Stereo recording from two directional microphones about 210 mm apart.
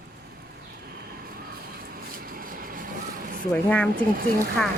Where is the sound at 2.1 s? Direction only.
40° right (ahead or behind).